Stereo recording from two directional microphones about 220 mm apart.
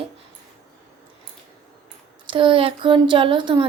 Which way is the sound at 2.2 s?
20° right (ahead or behind).